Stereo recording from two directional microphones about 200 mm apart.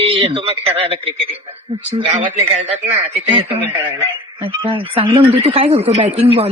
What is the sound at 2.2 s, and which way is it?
Speech, 40° right (ahead or behind).